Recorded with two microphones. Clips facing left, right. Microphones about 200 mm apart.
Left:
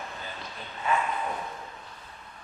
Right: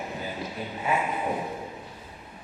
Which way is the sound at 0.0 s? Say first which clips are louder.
Right 7 dB; 10° right (ahead or behind).